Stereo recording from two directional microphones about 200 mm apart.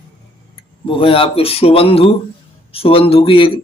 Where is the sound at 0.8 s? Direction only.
25° left (ahead or behind).